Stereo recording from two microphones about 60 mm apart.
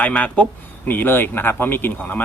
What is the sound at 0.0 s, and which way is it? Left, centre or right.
Speech, left.